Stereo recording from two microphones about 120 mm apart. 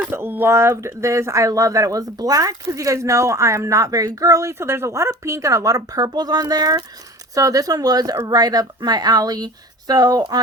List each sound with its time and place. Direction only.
0.1 s speech: 20° right (ahead or behind); by 10.4 s 35° right (ahead or behind)